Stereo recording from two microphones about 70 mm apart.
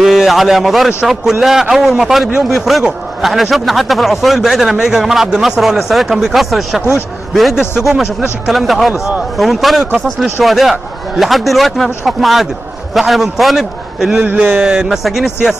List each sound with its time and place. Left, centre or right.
0.0 s a man's voice: centre
14.2 s speech: right
14.6 s a man's voice: centre